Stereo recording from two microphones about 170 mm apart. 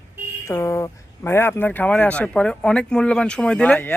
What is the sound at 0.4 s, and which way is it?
Speech, 15° left (ahead or behind).